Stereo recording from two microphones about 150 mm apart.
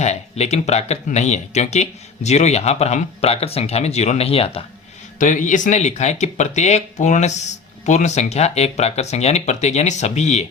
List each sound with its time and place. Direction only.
0.0 s speech: 45° left (ahead or behind)
5.2 s speech: 55° left (ahead or behind)